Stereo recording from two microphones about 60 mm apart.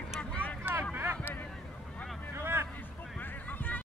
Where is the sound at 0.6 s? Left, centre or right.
Right.